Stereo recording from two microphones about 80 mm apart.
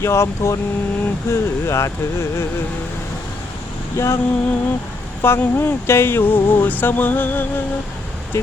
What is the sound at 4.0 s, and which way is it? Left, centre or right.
Speech, left.